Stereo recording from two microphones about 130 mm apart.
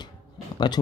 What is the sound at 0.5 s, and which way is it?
Speech, 35° left (ahead or behind).